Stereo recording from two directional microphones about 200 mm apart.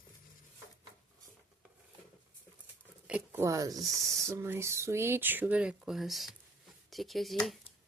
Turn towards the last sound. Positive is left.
turn(degrees=0)  # may be behind; listen again after turning